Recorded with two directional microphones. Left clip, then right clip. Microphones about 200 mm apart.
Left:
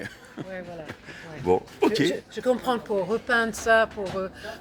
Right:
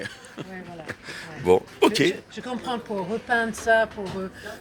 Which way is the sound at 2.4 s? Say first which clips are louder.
Left 6 dB; 65° left (ahead or behind).